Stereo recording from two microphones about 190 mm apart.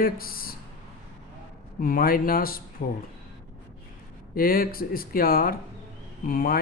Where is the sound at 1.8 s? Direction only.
50° left (ahead or behind).